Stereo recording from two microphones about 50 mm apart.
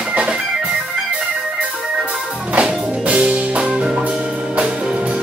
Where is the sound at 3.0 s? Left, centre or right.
Right.